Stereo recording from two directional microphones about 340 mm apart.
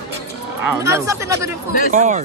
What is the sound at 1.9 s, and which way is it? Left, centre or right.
Speech, right.